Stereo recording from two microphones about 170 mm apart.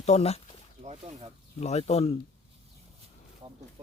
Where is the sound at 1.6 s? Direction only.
40° left (ahead or behind).